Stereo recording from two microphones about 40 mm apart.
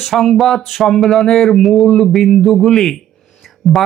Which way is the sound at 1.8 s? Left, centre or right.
Centre.